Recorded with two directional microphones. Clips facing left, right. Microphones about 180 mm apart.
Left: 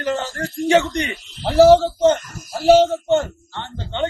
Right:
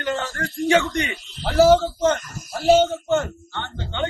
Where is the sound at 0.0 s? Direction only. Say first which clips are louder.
Left 3 dB; 35° left (ahead or behind).